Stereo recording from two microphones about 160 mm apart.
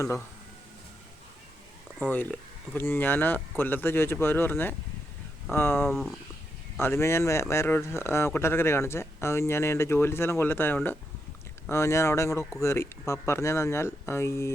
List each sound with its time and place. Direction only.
2.0 s speech: 10° left (ahead or behind)
5.9 s speech: centre (ahead or behind)
6.7 s speech: 15° left (ahead or behind)